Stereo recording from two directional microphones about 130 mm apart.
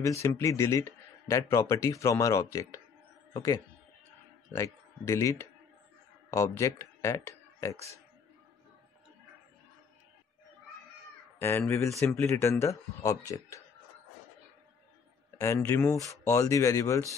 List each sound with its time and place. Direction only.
0.0 s speech: 20° left (ahead or behind)
5.0 s speech: 20° left (ahead or behind)
11.3 s speech: 15° left (ahead or behind)
15.3 s a sound: 25° left (ahead or behind)
15.6 s speech: 20° left (ahead or behind)